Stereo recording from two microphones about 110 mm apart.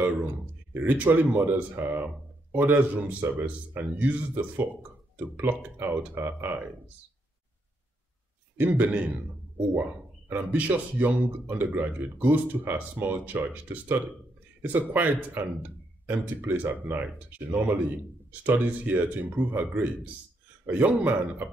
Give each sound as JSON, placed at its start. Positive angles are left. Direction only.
{"t": 0.0, "sound": "a sound", "side_deg": -15}
{"t": 0.7, "sound": "speech", "side_deg": -15}
{"t": 5.1, "sound": "speech", "side_deg": -15}
{"t": 8.5, "sound": "speech", "side_deg": -15}
{"t": 10.3, "sound": "speech", "side_deg": -15}